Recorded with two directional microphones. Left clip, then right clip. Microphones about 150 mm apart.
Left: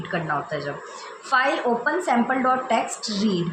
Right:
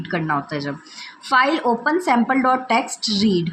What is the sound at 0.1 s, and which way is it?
A woman's voice, 45° right (ahead or behind).